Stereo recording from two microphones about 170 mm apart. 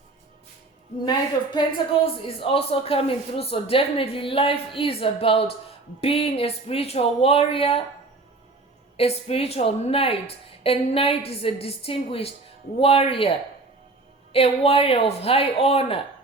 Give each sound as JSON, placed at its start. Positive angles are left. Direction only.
{"t": 1.0, "sound": "a woman's voice", "side_deg": 25}
{"t": 9.0, "sound": "a woman's voice", "side_deg": 35}
{"t": 14.3, "sound": "a woman's voice", "side_deg": 35}